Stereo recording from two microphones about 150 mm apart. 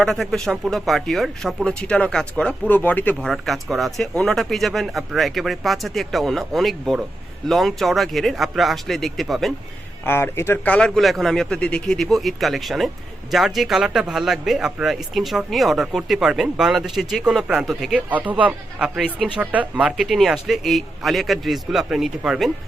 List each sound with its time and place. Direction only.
0.0 s speech: centre (ahead or behind)
10.1 s speech: 15° left (ahead or behind); by 22.5 s centre (ahead or behind)